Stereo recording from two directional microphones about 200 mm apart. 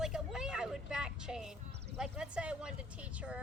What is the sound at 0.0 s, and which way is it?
Vehicle, centre (ahead or behind).